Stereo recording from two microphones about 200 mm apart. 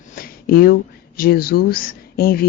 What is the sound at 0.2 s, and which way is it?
Speech, 50° left (ahead or behind).